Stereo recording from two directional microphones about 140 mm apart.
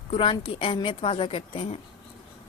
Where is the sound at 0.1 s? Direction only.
35° left (ahead or behind).